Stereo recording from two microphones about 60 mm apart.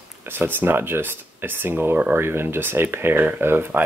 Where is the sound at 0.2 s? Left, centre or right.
Right.